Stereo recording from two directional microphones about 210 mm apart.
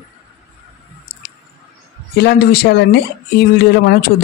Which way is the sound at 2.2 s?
50° left (ahead or behind).